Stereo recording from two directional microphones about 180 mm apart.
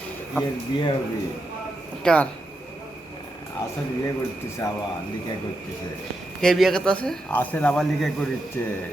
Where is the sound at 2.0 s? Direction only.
5° left (ahead or behind).